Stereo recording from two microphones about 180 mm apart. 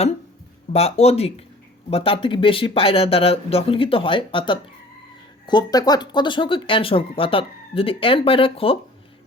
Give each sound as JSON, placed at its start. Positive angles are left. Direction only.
{"t": 0.7, "sound": "speech", "side_deg": 35}